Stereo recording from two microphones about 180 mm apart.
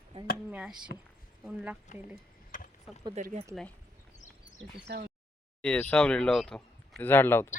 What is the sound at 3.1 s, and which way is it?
Speech, 40° right (ahead or behind).